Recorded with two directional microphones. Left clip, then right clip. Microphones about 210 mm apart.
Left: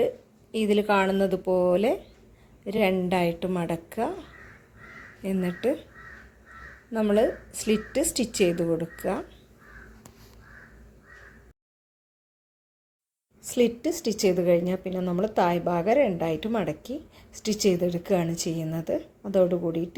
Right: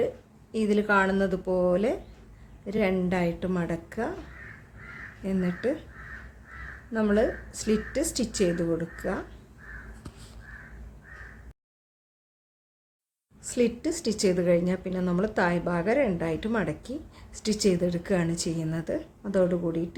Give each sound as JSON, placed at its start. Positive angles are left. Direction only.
{"t": 0.5, "sound": "a woman's voice", "side_deg": 15}
{"t": 5.2, "sound": "a woman's voice", "side_deg": 10}
{"t": 6.9, "sound": "a woman's voice", "side_deg": 10}
{"t": 13.5, "sound": "a woman's voice", "side_deg": 10}